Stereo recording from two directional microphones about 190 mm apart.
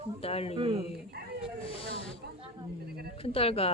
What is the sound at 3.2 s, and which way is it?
Speech, 30° left (ahead or behind).